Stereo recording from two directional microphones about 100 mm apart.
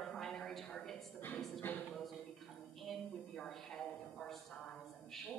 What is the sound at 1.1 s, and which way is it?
Speech, 20° left (ahead or behind).